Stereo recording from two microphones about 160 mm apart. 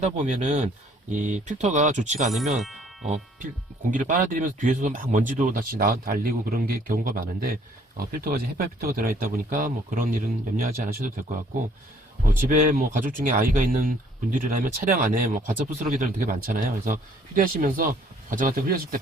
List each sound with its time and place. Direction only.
0.0 s speech: 45° right (ahead or behind)
2.6 s speech: centre (ahead or behind)
3.9 s speech: 55° right (ahead or behind)
12.3 s speech: 60° right (ahead or behind)